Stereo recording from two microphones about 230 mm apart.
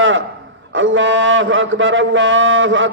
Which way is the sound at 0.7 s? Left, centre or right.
Right.